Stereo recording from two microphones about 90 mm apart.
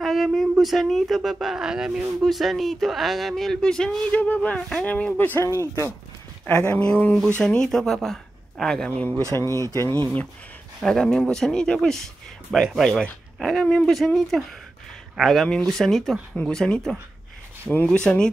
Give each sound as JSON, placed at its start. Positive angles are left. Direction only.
{"t": 0.0, "sound": "speech", "side_deg": 0}
{"t": 6.7, "sound": "speech", "side_deg": 15}
{"t": 9.5, "sound": "speech", "side_deg": -40}
{"t": 9.9, "sound": "speech", "side_deg": 15}